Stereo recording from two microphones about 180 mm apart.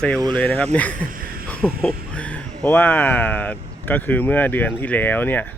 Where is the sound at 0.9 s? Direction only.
50° right (ahead or behind).